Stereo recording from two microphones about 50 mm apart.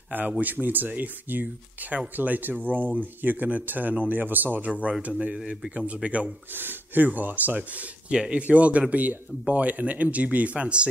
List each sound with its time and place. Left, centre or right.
0.4 s speech: right
6.0 s speech: right
6.5 s speech: right
8.1 s speech: centre